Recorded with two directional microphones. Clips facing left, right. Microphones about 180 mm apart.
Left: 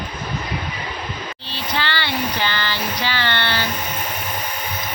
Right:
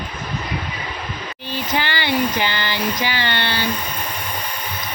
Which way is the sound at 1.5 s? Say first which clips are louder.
Right 2 dB; 15° right (ahead or behind).